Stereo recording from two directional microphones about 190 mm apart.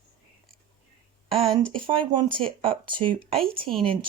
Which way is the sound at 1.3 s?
30° right (ahead or behind).